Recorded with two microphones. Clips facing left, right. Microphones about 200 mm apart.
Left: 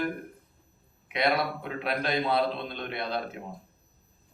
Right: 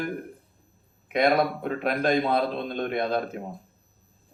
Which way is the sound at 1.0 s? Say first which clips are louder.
Right 5 dB; 45° right (ahead or behind).